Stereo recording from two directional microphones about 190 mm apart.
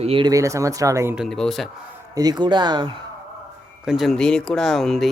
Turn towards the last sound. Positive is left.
turn(degrees=0)  # may be behind; listen again after turning